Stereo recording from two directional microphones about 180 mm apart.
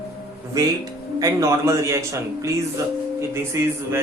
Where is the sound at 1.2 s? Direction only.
15° right (ahead or behind).